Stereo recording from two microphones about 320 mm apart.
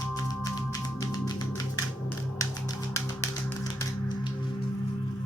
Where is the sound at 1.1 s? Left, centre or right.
Centre.